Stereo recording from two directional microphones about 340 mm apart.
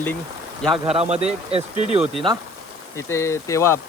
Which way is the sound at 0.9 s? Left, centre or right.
Centre.